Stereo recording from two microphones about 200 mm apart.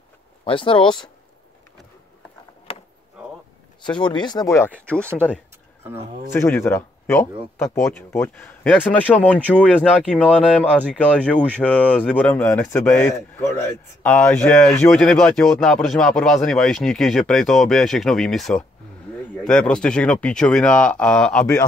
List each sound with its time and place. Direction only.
0.5 s speech: 25° left (ahead or behind)
3.8 s speech: 20° left (ahead or behind)